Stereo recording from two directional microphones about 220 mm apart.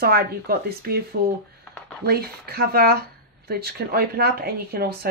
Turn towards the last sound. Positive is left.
turn(degrees=-45)  # may be behind; listen again after turning